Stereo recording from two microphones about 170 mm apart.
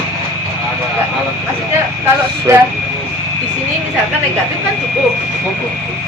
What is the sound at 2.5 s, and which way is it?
Speech, 15° right (ahead or behind).